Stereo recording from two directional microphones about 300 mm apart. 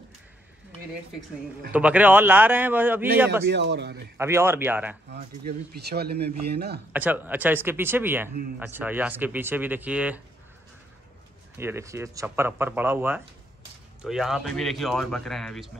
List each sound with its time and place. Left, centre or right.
1.7 s speech: centre
3.4 s speech: right
4.2 s speech: centre
5.1 s speech: right
6.9 s speech: centre
11.5 s speech: centre